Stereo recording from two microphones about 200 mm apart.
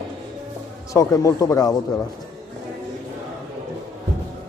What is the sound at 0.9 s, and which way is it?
Speech, 15° left (ahead or behind).